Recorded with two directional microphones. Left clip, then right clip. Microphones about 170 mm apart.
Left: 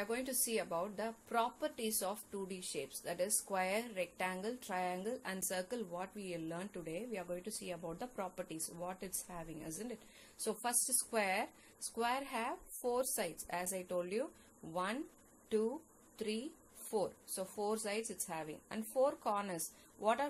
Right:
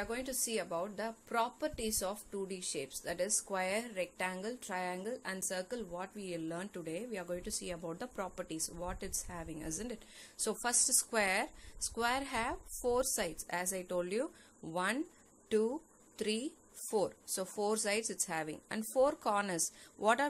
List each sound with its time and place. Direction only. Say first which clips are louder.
0.0 s a woman's voice: right 1 dB; 10° right (ahead or behind); by 15.0 s 30° right (ahead or behind)
16.2 s a woman's voice: right 5 dB; 30° right (ahead or behind)